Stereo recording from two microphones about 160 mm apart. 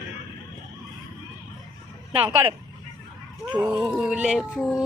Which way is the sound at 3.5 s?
20° right (ahead or behind).